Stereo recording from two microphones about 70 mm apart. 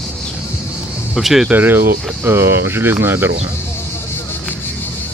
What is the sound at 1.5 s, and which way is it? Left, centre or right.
Speech, right.